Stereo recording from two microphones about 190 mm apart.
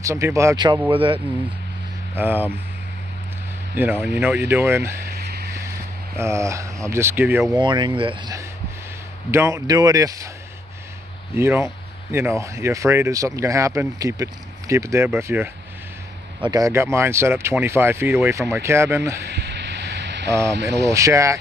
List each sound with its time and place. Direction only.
0.0 s speech: 15° right (ahead or behind)
2.1 s speech: 10° right (ahead or behind)
3.7 s speech: 10° right (ahead or behind)
5.0 s a sound: 55° right (ahead or behind)
6.1 s speech: 15° right (ahead or behind)
7.5 s speech: 25° right (ahead or behind)
9.3 s speech: 15° right (ahead or behind)
11.3 s speech: 15° right (ahead or behind)
19.2 s a sound: 60° right (ahead or behind)
20.5 s speech: 65° right (ahead or behind)
20.9 s speech: 15° right (ahead or behind)